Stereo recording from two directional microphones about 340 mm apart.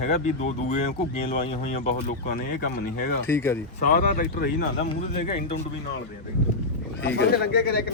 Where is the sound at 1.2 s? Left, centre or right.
Centre.